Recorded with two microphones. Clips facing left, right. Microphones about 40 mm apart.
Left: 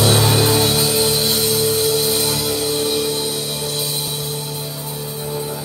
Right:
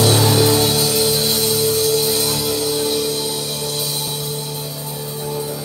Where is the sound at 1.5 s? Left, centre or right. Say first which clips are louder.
Right 1 dB; left.